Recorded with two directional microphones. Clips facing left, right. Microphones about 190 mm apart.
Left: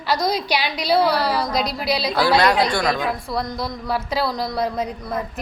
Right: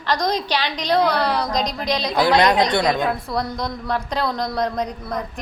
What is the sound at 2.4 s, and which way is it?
Speech, 15° right (ahead or behind).